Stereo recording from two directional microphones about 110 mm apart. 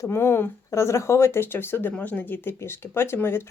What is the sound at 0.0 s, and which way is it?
Speech, 20° left (ahead or behind).